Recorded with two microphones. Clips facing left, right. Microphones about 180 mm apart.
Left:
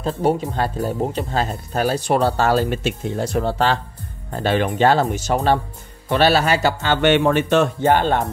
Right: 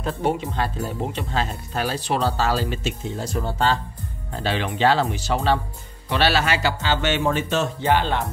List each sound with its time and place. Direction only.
0.0 s speech: 40° left (ahead or behind); by 3.8 s 65° left (ahead or behind)
4.3 s speech: 50° left (ahead or behind)
6.8 s speech: 55° left (ahead or behind)